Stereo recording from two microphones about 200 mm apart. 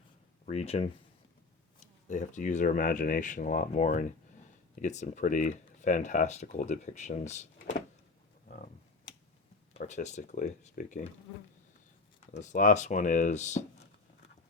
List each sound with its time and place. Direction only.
0.4 s speech: 30° left (ahead or behind)
8.4 s a sound: 40° left (ahead or behind)
9.7 s speech: 35° left (ahead or behind)
12.4 s speech: 40° left (ahead or behind)